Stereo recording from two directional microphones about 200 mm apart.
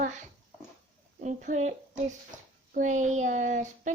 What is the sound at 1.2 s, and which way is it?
A child's voice, 35° right (ahead or behind).